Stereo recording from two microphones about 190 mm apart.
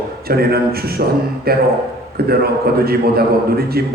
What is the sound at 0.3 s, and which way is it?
A man's voice, 55° right (ahead or behind).